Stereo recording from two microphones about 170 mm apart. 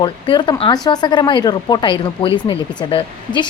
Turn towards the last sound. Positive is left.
turn(degrees=30)  # may be behind; listen again after turning